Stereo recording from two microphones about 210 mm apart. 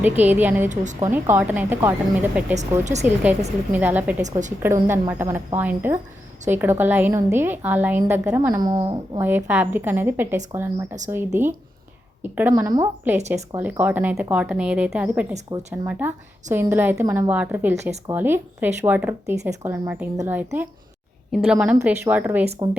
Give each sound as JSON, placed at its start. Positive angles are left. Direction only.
{"t": 0.0, "sound": "a woman's voice", "side_deg": -10}
{"t": 2.8, "sound": "a woman's voice", "side_deg": -35}
{"t": 3.7, "sound": "a woman's voice", "side_deg": -10}
{"t": 4.2, "sound": "a woman's voice", "side_deg": -35}
{"t": 4.6, "sound": "a woman's voice", "side_deg": -10}
{"t": 9.2, "sound": "a woman's voice", "side_deg": -10}